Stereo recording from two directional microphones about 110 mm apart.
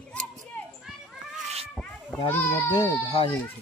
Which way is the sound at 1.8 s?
5° left (ahead or behind).